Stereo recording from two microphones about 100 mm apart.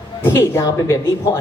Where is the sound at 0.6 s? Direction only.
35° left (ahead or behind).